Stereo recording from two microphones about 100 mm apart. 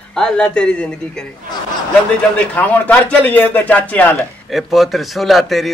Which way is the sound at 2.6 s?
15° left (ahead or behind).